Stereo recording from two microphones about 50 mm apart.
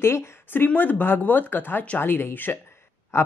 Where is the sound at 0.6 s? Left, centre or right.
Left.